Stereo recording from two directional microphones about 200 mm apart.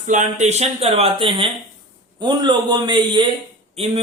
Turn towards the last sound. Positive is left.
turn(degrees=-30)  # may be behind; listen again after turning